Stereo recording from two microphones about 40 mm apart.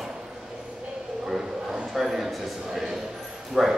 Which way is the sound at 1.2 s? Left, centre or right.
Centre.